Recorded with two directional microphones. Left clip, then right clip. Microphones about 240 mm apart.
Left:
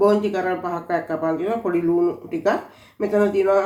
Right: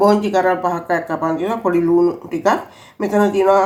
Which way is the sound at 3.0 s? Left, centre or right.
Right.